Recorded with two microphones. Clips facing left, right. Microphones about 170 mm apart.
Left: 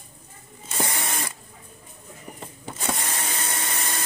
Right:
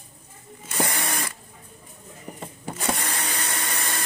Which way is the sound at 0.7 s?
20° left (ahead or behind).